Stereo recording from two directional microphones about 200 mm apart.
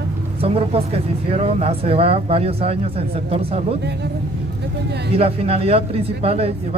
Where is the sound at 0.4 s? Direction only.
30° right (ahead or behind).